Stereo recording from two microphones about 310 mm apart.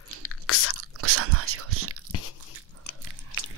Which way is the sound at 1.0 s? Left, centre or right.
Right.